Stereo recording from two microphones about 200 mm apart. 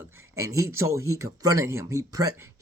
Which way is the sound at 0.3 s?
15° right (ahead or behind).